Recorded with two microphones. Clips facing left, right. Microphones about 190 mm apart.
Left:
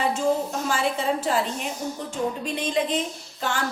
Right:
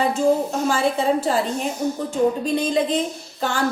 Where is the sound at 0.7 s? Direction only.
35° right (ahead or behind).